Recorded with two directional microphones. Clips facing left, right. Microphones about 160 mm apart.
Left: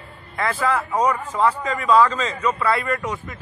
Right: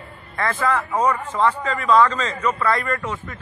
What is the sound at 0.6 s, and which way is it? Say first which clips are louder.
A man's voice: even; 10° left (ahead or behind).